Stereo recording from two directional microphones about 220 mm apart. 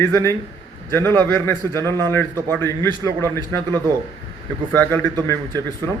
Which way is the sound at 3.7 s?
15° right (ahead or behind).